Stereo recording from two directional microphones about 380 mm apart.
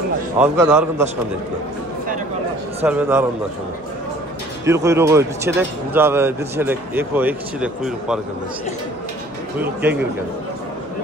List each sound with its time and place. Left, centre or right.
0.4 s speech: centre
2.8 s speech: centre
4.6 s speech: centre
9.6 s speech: centre